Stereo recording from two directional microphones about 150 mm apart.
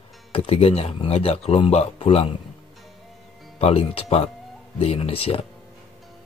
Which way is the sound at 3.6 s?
40° left (ahead or behind).